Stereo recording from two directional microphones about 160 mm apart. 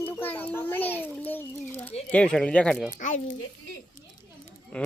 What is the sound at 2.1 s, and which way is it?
Speech, 5° left (ahead or behind).